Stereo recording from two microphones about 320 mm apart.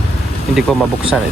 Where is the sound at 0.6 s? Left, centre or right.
Centre.